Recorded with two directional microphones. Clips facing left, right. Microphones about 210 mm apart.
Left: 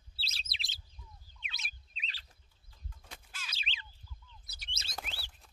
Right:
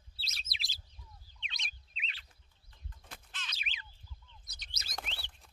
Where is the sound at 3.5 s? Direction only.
30° left (ahead or behind).